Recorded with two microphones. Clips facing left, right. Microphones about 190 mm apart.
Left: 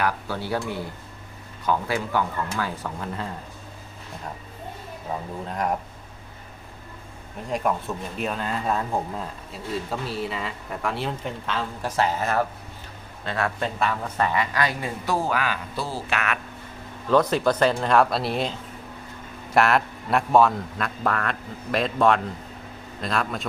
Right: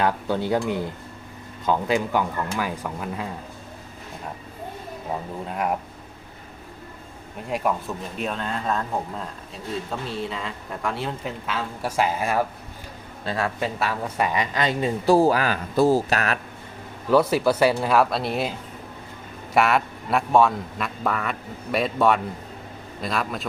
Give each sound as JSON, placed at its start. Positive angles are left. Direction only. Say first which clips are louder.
{"t": 0.0, "sound": "speech", "louder": "right 4 dB", "side_deg": -20}
{"t": 5.5, "sound": "speech", "louder": "even", "side_deg": -5}
{"t": 7.5, "sound": "speech", "louder": "even", "side_deg": 0}
{"t": 17.1, "sound": "speech", "louder": "right 1 dB", "side_deg": -10}
{"t": 19.5, "sound": "speech", "louder": "even", "side_deg": 0}